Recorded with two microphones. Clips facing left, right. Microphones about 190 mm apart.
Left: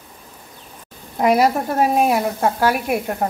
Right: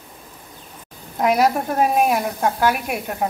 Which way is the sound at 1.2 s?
5° left (ahead or behind).